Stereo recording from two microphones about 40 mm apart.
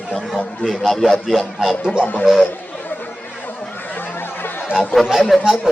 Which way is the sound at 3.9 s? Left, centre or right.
Left.